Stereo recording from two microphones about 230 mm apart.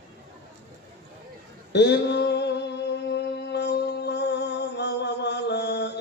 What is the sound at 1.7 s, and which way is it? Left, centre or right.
Mantra, left.